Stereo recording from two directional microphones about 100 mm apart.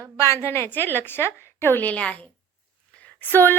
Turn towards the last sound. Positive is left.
turn(degrees=20)  # may be behind; listen again after turning